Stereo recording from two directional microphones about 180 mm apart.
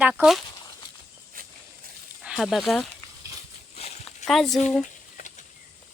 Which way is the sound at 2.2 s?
Centre (ahead or behind).